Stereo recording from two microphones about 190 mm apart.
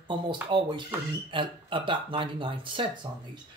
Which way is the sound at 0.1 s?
25° right (ahead or behind).